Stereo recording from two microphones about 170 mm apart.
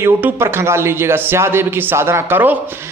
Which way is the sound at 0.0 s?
10° right (ahead or behind).